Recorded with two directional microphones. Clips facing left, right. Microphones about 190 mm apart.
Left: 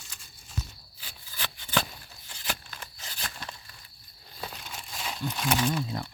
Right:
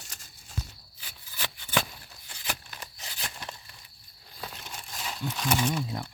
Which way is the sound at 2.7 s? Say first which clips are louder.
Even; 15° right (ahead or behind).